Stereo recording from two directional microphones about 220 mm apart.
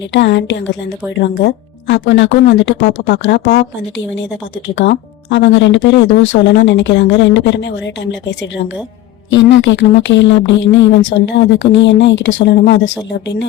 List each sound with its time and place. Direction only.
0.1 s speech: 55° left (ahead or behind)
4.8 s speech: 50° left (ahead or behind)
9.3 s speech: 55° left (ahead or behind)